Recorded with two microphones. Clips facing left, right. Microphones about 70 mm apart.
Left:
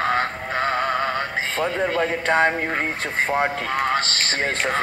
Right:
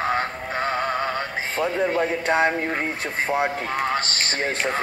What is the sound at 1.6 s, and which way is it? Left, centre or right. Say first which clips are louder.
Speech: right 1 dB; left.